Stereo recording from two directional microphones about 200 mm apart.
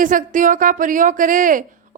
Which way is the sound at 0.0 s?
40° right (ahead or behind).